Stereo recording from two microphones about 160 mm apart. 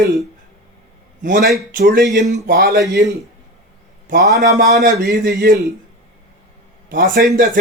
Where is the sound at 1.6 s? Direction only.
70° right (ahead or behind); by 2.2 s 90° right.